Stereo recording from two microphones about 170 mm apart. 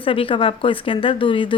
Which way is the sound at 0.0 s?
30° left (ahead or behind).